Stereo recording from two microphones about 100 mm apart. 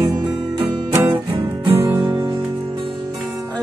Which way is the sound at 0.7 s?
20° right (ahead or behind).